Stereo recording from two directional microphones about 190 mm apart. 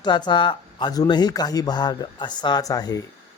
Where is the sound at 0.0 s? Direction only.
25° left (ahead or behind).